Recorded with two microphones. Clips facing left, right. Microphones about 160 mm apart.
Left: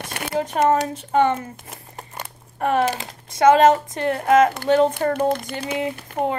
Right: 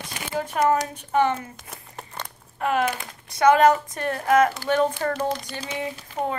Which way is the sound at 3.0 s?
25° left (ahead or behind).